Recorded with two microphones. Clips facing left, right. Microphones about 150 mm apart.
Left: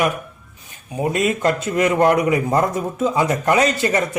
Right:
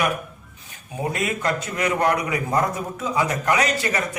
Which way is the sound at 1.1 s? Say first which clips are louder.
Left 6 dB; 25° left (ahead or behind).